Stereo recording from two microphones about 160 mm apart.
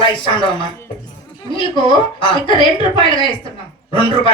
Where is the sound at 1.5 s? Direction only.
30° left (ahead or behind).